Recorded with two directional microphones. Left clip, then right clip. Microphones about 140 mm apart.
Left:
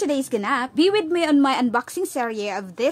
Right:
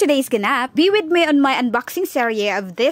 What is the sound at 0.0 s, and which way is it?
A woman's voice, 45° right (ahead or behind).